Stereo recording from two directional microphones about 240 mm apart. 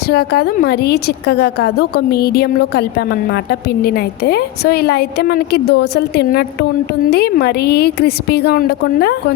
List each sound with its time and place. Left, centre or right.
0.1 s a woman's voice: left